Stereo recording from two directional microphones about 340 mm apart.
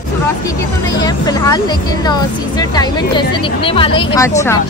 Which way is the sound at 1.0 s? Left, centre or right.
Centre.